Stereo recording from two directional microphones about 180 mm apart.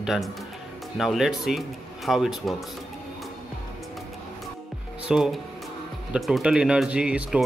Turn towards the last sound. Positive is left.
turn(degrees=-5)  # may be behind; listen again after turning